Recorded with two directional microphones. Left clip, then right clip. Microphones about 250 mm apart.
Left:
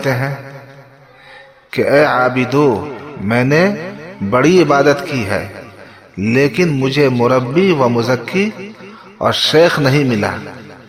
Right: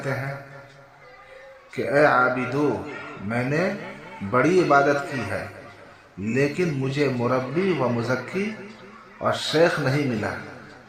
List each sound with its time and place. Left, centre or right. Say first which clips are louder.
0.0 s a man's voice: left 11 dB; left
1.7 s a man's voice: left 7 dB; left